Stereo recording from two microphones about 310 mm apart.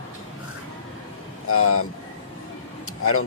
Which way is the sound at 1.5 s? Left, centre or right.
Left.